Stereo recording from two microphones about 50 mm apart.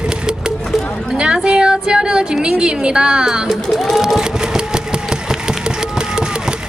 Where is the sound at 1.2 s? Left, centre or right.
Centre.